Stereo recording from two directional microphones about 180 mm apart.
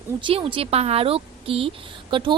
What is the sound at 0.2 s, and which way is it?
A woman's voice, 30° right (ahead or behind).